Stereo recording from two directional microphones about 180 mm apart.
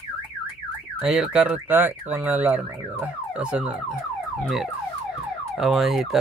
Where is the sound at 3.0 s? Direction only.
5° right (ahead or behind).